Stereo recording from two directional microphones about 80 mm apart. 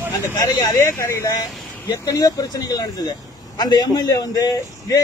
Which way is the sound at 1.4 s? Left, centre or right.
Left.